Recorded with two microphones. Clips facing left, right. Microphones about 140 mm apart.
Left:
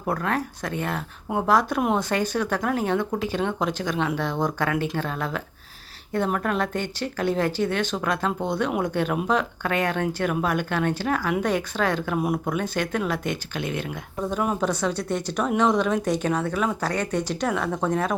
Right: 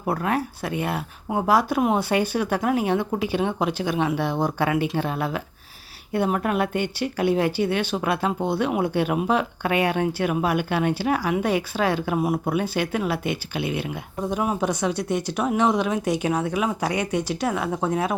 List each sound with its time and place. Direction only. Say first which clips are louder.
0.0 s speech: right 2 dB; 10° right (ahead or behind)